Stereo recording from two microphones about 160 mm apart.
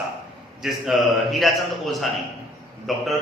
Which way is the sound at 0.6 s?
Centre (ahead or behind).